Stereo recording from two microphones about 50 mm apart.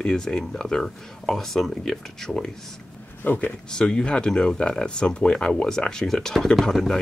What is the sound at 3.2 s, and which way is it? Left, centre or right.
Speech, left.